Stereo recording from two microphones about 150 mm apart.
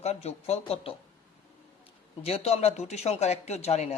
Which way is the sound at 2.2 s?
45° left (ahead or behind).